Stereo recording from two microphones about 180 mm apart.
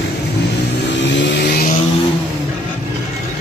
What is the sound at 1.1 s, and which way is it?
Vehicle, 70° left (ahead or behind).